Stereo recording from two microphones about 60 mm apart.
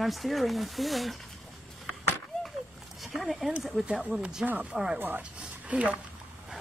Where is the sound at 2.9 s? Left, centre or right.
Centre.